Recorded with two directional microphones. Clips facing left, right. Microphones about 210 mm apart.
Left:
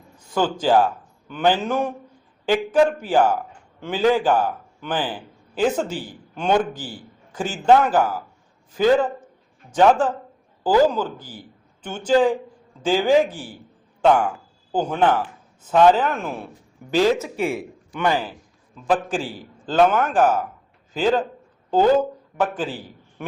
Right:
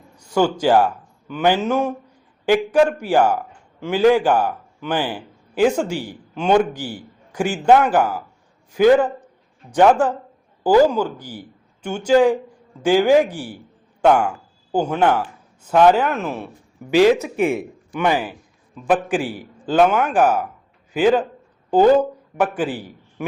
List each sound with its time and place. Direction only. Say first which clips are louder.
0.3 s a man's voice: right 2 dB; 10° right (ahead or behind)
16.9 s a man's voice: right 5 dB; 15° right (ahead or behind)